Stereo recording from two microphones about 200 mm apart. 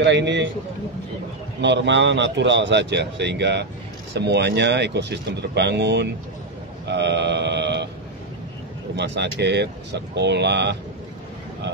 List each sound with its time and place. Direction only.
0.0 s speech: 60° right (ahead or behind)
1.6 s speech: 60° right (ahead or behind)
8.9 s speech: 60° right (ahead or behind)